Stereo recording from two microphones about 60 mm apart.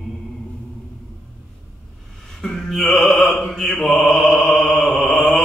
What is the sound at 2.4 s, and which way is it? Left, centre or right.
Mantra, centre.